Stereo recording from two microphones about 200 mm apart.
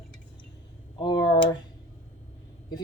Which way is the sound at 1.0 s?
25° left (ahead or behind).